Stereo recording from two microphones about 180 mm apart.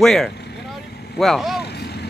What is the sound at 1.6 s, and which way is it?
Vehicle, 65° left (ahead or behind).